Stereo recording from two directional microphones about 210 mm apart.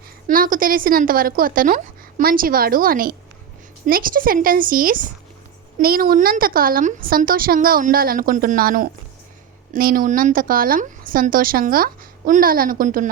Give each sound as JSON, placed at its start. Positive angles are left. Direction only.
{"t": 0.3, "sound": "a woman's voice", "side_deg": -40}